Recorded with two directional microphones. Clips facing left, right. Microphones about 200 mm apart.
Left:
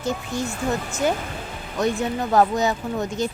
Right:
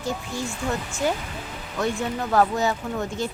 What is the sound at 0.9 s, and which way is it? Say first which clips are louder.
Speech: left 2 dB; 20° left (ahead or behind).